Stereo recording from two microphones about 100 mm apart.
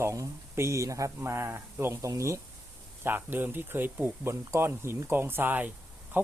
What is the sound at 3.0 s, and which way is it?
Speech, 20° right (ahead or behind).